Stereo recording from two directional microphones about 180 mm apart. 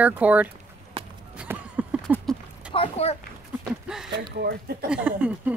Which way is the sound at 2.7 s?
30° left (ahead or behind).